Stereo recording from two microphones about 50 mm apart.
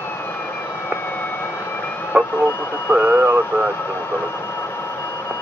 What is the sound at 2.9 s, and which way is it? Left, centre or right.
Speech, right.